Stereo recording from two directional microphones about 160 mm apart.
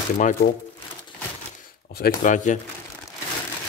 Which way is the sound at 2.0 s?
60° left (ahead or behind).